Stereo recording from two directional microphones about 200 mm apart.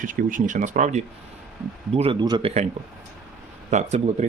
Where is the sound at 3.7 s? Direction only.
35° right (ahead or behind).